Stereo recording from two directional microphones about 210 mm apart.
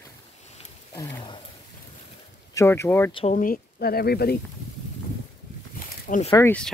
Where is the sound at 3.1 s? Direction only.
25° left (ahead or behind).